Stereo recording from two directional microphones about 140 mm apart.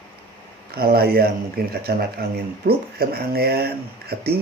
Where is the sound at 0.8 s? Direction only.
90° right.